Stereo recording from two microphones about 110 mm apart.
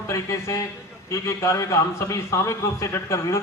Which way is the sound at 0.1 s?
25° left (ahead or behind).